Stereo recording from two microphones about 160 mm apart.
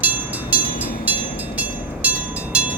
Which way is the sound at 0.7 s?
65° left (ahead or behind).